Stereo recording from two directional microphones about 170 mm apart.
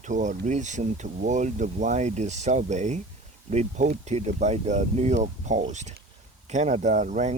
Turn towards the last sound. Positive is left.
turn(degrees=-45)  # may be behind; listen again after turning